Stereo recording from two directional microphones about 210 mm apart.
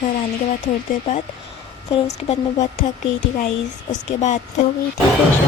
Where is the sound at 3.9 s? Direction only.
35° left (ahead or behind).